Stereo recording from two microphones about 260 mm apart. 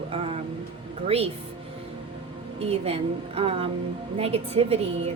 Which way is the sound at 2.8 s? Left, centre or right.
Right.